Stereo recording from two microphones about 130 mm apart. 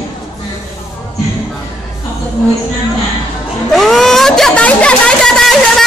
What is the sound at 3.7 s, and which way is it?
Speech, centre (ahead or behind).